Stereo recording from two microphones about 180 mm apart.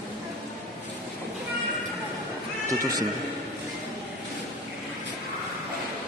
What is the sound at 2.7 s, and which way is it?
Speech, 20° right (ahead or behind).